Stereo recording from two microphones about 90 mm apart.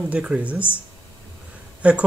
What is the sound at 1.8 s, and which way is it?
Speech, 15° right (ahead or behind).